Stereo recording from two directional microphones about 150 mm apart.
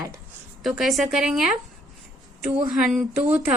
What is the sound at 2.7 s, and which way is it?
Speech, centre (ahead or behind).